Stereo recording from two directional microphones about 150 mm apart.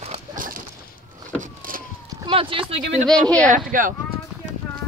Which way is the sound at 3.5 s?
65° right (ahead or behind).